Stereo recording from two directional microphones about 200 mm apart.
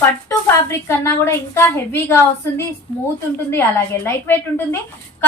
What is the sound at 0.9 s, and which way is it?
A woman's voice, 15° left (ahead or behind).